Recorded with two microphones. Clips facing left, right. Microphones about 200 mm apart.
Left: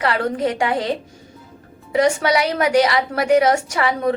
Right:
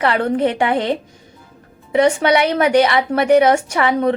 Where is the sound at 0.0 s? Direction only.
25° right (ahead or behind).